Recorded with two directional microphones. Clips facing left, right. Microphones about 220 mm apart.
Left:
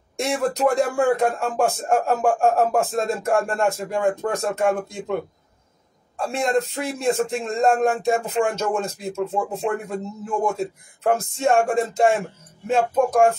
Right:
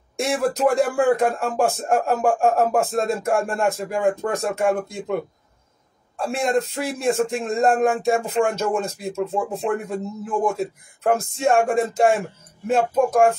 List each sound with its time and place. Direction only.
0.2 s a man's voice: centre (ahead or behind)